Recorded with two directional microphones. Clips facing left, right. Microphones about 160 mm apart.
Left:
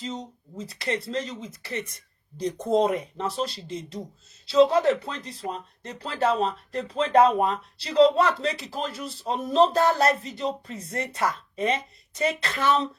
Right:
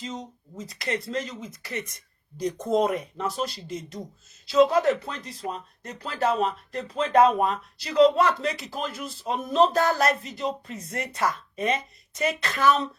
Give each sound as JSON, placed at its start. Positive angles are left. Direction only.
{"t": 0.0, "sound": "speech", "side_deg": 30}